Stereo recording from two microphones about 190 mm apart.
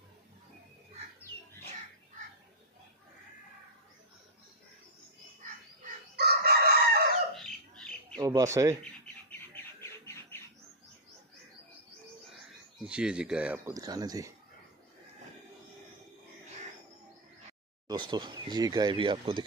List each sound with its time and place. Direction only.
6.1 s chicken: 60° right (ahead or behind)
7.3 s squawk: 5° left (ahead or behind)
8.2 s speech: 20° right (ahead or behind)
9.8 s music: 15° left (ahead or behind)
12.8 s speech: 5° right (ahead or behind)
13.7 s speech: 20° right (ahead or behind)
17.8 s speech: 20° right (ahead or behind)